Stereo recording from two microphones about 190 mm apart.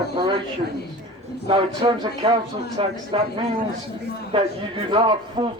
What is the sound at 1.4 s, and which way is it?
A man's voice, 30° right (ahead or behind).